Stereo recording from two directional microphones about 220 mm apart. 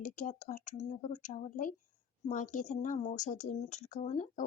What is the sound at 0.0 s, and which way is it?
Speech, 35° left (ahead or behind).